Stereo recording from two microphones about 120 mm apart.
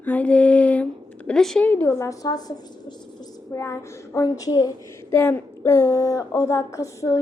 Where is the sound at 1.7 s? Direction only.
20° left (ahead or behind).